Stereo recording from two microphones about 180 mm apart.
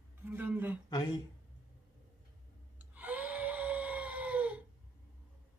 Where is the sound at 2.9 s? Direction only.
10° right (ahead or behind).